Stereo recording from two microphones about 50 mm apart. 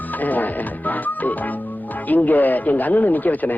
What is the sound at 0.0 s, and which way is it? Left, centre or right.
Music, left.